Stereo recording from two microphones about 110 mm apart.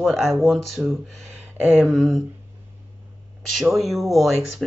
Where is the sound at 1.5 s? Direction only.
20° right (ahead or behind).